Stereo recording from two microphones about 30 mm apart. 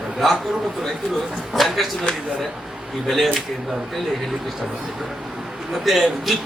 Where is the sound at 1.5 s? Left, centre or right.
Centre.